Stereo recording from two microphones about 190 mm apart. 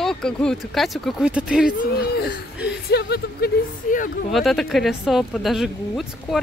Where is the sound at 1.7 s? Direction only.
50° left (ahead or behind).